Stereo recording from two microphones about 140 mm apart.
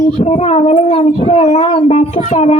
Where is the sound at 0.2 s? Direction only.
50° left (ahead or behind).